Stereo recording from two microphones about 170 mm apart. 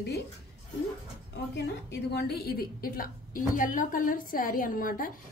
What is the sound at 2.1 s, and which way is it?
A woman's voice, 65° left (ahead or behind).